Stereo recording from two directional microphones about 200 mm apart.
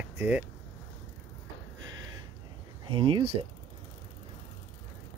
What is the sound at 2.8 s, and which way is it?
Speech, 25° right (ahead or behind).